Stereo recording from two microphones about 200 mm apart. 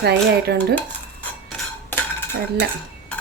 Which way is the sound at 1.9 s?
10° left (ahead or behind).